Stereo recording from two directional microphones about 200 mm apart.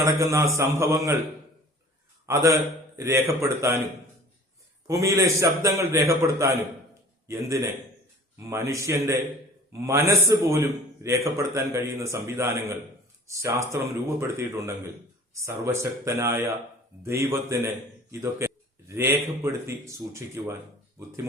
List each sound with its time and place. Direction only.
0.0 s a man's voice: 15° right (ahead or behind)
2.2 s a man's voice: 15° right (ahead or behind)
4.9 s a man's voice: 15° right (ahead or behind)